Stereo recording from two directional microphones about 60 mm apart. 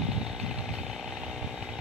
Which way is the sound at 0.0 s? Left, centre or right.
Centre.